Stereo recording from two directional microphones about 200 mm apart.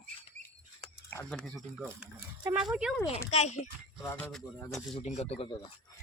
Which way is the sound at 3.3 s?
35° left (ahead or behind).